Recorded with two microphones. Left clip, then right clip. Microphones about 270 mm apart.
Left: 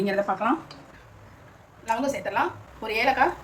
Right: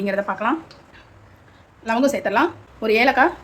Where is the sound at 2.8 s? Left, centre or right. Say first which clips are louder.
Right 6 dB; right.